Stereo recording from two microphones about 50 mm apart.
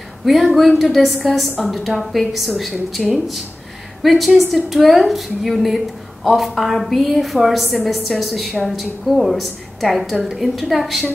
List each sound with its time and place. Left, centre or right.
0.2 s a woman's voice: centre